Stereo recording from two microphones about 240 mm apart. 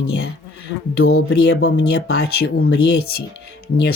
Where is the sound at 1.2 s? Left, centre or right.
Left.